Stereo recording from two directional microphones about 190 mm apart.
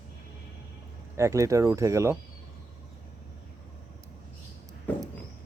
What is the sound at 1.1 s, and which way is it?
Speech, 15° right (ahead or behind).